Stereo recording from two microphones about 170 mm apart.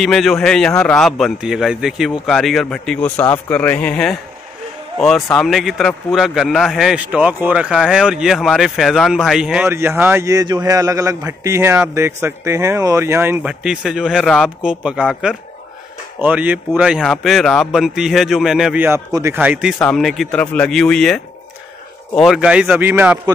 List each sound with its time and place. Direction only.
0.0 s speech: centre (ahead or behind)
19.8 s speech: 5° left (ahead or behind)